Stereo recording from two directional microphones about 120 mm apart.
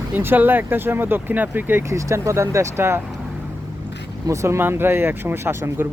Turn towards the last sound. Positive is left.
turn(degrees=-20)  # may be behind; listen again after turning